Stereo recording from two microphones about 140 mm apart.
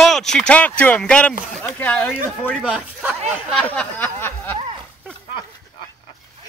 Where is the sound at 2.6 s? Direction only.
10° right (ahead or behind).